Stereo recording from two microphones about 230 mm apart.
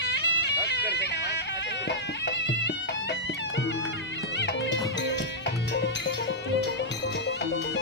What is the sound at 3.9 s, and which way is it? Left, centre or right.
Music, left.